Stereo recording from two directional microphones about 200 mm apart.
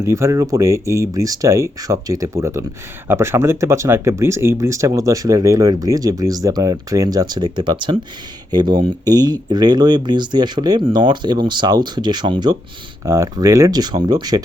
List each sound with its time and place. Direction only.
0.0 s speech: 15° right (ahead or behind)